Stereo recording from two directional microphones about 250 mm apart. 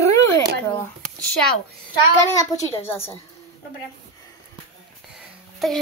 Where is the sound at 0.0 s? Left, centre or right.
Right.